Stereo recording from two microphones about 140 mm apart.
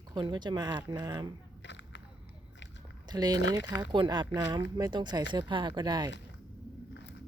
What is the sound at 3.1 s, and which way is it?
Speech, 30° right (ahead or behind).